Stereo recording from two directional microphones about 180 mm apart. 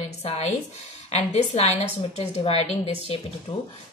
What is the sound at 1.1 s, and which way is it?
A woman's voice, 35° left (ahead or behind).